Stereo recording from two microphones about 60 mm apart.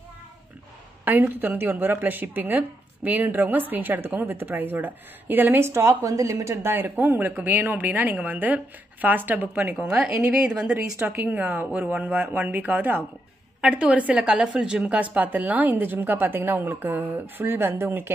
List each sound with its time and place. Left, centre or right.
1.0 s a woman's voice: right
5.7 s a woman's voice: right
9.8 s speech: centre
11.2 s a woman's voice: right
13.6 s a woman's voice: centre; by 18.1 s right